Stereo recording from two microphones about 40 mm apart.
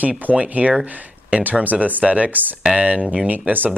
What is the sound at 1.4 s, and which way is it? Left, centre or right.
Speech, right.